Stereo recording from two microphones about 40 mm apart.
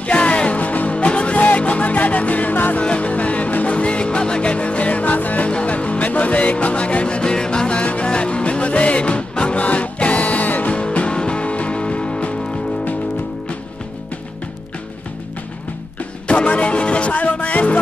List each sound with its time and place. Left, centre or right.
0.0 s music: left
2.8 s music: left
5.5 s music: left
10.7 s music: left
16.3 s music: left